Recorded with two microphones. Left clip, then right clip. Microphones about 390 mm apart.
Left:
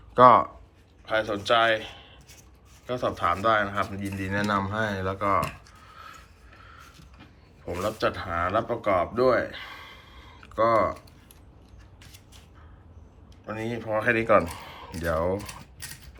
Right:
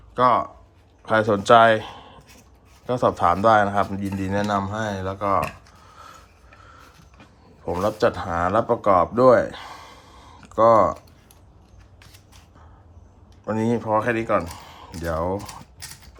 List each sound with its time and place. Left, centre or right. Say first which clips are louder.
0.1 s speech: left 3 dB; centre
1.0 s a man's voice: right 7 dB; right
7.6 s speech: right 6 dB; centre
13.4 s a man's voice: right 9 dB; centre